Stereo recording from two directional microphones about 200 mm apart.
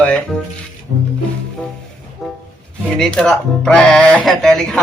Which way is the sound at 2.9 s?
5° left (ahead or behind).